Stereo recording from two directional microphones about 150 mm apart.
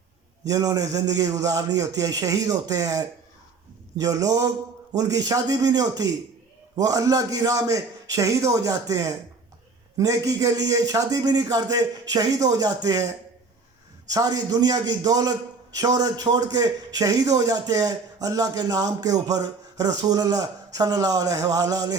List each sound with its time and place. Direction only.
0.4 s a man's voice: 25° right (ahead or behind)
14.1 s a man's voice: 25° right (ahead or behind)